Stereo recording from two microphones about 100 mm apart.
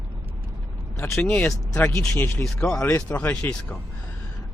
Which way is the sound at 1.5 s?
30° left (ahead or behind).